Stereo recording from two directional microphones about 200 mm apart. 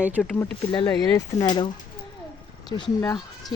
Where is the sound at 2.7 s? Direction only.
20° left (ahead or behind).